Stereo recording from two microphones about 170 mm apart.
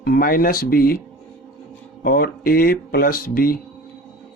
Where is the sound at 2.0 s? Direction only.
60° left (ahead or behind).